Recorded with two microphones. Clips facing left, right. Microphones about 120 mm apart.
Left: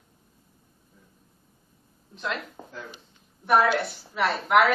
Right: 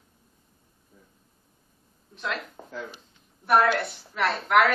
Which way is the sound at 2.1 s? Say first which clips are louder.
Even; centre (ahead or behind).